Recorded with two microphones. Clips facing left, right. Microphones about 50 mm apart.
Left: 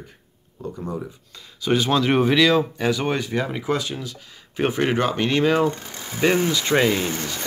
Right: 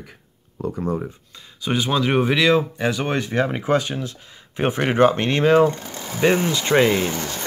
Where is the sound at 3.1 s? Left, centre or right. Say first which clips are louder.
Right 2 dB; right.